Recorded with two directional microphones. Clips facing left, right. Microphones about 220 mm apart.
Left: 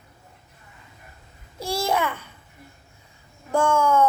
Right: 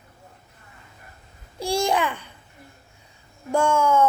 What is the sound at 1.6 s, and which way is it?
Babbling, 15° right (ahead or behind).